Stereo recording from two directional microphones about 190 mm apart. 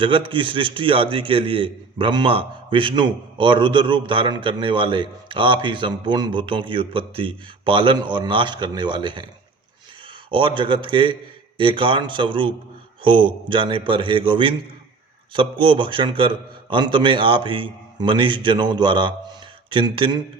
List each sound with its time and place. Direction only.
0.0 s a man's voice: 25° right (ahead or behind)
10.3 s a man's voice: 25° right (ahead or behind)